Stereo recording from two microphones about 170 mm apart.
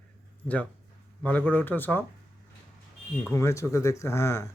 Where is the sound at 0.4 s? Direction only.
10° left (ahead or behind).